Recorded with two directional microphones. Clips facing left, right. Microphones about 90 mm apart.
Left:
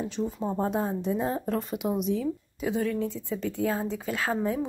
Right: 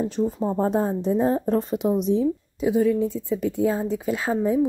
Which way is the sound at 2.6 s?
15° right (ahead or behind).